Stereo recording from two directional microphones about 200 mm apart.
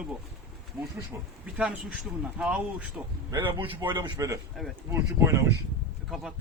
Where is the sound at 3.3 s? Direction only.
25° right (ahead or behind).